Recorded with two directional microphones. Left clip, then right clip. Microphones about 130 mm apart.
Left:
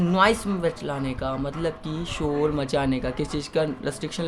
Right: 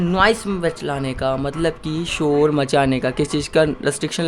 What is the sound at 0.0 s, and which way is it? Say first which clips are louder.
Speech: right 4 dB; 25° right (ahead or behind).